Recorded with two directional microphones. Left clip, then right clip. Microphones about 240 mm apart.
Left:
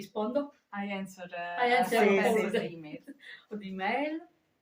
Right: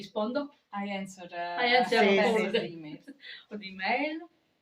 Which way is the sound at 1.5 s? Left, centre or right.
Left.